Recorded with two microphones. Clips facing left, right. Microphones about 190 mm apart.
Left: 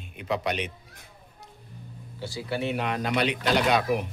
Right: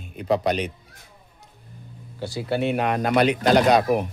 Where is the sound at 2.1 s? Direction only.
45° right (ahead or behind).